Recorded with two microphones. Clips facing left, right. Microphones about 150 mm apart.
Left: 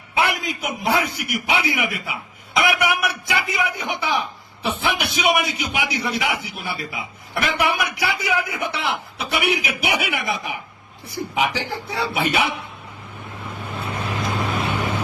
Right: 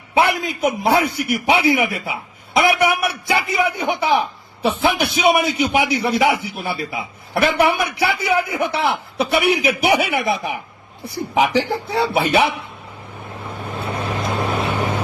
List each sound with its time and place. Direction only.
0.1 s a man's voice: 30° right (ahead or behind)
13.8 s vehicle: 30° right (ahead or behind)